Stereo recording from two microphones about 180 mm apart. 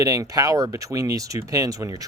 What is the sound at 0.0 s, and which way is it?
Speech, 20° right (ahead or behind).